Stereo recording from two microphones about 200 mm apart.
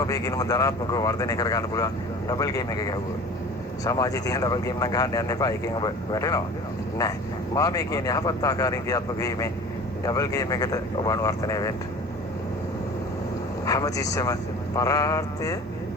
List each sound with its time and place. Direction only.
0.0 s speech: 20° left (ahead or behind)
7.5 s speech: 15° left (ahead or behind)
13.7 s speech: 15° left (ahead or behind)